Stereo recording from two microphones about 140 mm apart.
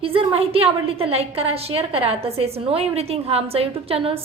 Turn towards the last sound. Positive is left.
turn(degrees=-45)  # may be behind; listen again after turning